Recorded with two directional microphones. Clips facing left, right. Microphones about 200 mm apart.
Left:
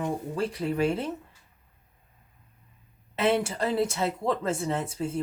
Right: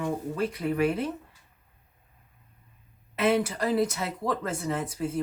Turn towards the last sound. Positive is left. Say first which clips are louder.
# even
turn(degrees=25)  # may be behind; listen again after turning